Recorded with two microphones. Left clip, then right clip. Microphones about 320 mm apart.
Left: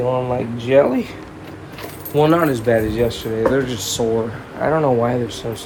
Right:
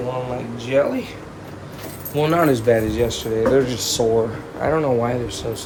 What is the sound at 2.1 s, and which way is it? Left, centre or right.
Speech, centre.